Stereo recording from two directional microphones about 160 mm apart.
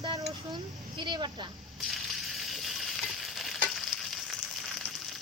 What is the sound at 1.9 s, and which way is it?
Frying, centre (ahead or behind).